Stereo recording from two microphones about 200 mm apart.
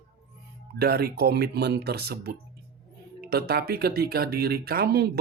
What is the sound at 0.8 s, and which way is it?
Speech, 50° right (ahead or behind).